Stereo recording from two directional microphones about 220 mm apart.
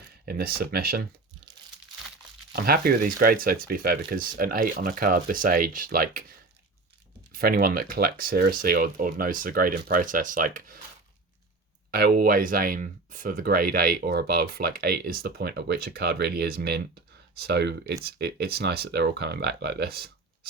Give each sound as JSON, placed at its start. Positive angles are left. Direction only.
{"t": 0.3, "sound": "speech", "side_deg": -45}
{"t": 2.5, "sound": "speech", "side_deg": -45}
{"t": 7.3, "sound": "speech", "side_deg": -40}
{"t": 11.9, "sound": "speech", "side_deg": -45}